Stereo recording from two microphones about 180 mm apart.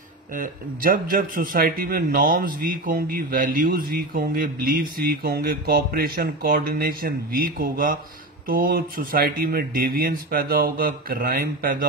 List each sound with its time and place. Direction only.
0.3 s speech: 50° right (ahead or behind)